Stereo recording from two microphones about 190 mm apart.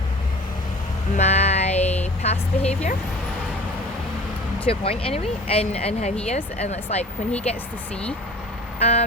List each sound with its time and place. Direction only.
1.1 s a sound: 35° left (ahead or behind)
2.2 s a woman's voice: 35° left (ahead or behind)
4.6 s speech: 30° left (ahead or behind)
8.8 s speech: 35° left (ahead or behind)